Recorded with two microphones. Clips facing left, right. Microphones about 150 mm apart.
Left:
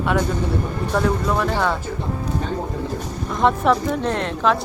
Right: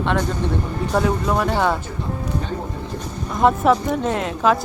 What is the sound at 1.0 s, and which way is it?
Speech, 5° right (ahead or behind).